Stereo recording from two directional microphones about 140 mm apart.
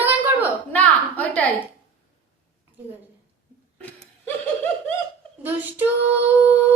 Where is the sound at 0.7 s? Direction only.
10° left (ahead or behind).